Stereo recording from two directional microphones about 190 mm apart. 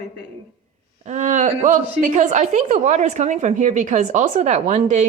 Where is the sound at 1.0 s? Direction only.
40° right (ahead or behind).